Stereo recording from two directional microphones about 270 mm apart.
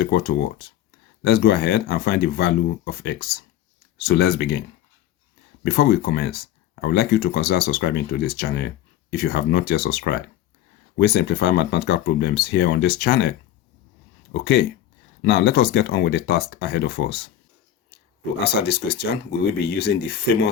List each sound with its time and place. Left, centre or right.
0.0 s speech: left
5.6 s speech: left
14.4 s speech: left
18.6 s speech: left